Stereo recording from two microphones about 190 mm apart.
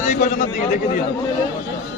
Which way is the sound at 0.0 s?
40° left (ahead or behind).